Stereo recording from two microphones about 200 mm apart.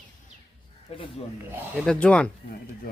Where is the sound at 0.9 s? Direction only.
30° left (ahead or behind).